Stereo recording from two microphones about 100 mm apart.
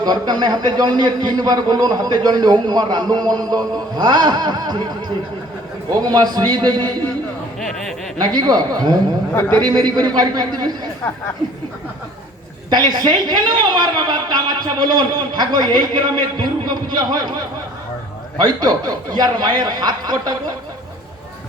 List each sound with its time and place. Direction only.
0.0 s a man's voice: 45° right (ahead or behind)
7.6 s a sound: centre (ahead or behind)
8.2 s a man's voice: 45° right (ahead or behind)
9.3 s a man's voice: 15° left (ahead or behind)
9.7 s a man's voice: 45° right (ahead or behind)
12.7 s a man's voice: 45° right (ahead or behind)